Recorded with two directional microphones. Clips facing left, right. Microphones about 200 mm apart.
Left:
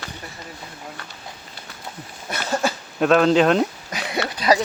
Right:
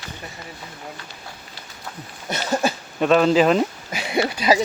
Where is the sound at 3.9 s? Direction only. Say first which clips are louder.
Right 7 dB; 20° right (ahead or behind).